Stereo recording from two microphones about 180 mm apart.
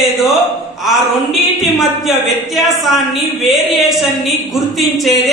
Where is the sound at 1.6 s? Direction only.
Centre (ahead or behind).